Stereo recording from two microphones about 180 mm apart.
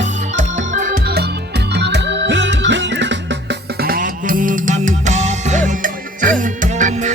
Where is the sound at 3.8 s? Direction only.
50° right (ahead or behind).